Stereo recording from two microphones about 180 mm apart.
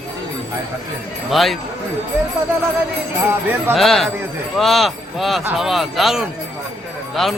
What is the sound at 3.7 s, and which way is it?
Speech, centre (ahead or behind).